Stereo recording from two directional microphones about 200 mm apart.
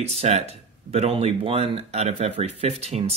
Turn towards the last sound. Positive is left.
turn(degrees=-30)  # may be behind; listen again after turning